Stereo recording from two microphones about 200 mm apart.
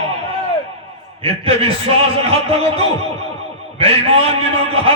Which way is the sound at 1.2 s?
30° right (ahead or behind).